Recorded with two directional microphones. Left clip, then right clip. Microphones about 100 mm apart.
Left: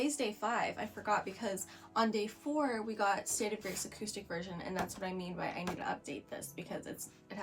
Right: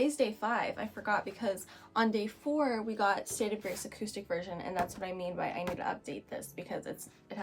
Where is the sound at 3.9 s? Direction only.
20° right (ahead or behind).